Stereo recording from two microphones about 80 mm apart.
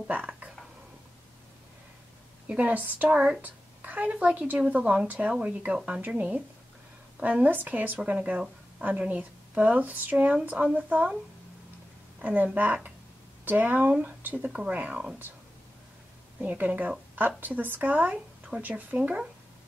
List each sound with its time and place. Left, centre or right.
0.1 s speech: centre
2.4 s a woman's voice: centre
12.2 s a woman's voice: centre
16.3 s a woman's voice: right